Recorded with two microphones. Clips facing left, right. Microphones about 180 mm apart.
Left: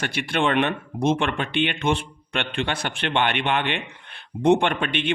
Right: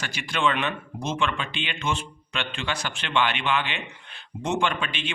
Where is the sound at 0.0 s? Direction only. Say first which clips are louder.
Left 3 dB; 60° left (ahead or behind).